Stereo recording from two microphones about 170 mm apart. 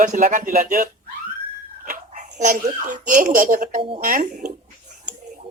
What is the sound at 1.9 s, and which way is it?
Dog, 50° right (ahead or behind).